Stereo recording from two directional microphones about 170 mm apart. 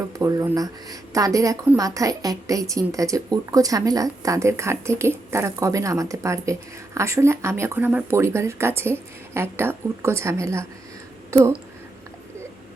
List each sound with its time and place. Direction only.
0.2 s a woman's voice: 20° right (ahead or behind)